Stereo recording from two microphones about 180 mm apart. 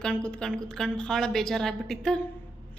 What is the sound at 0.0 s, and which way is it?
A woman's voice, 5° left (ahead or behind).